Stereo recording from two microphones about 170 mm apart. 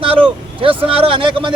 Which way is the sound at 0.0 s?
30° right (ahead or behind).